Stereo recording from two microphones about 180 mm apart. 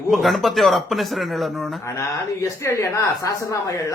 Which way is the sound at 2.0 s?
15° left (ahead or behind).